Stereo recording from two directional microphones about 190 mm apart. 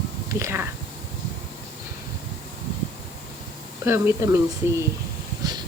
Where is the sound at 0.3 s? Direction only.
10° right (ahead or behind).